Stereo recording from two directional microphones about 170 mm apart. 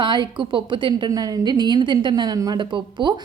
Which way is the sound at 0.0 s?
30° right (ahead or behind).